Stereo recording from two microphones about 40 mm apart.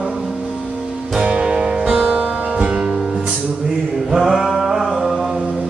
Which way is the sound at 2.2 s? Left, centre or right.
Right.